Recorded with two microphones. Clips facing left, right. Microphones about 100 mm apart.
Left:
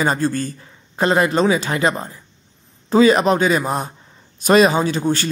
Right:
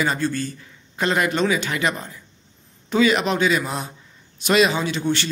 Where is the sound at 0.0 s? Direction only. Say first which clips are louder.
Left 4 dB; 40° left (ahead or behind).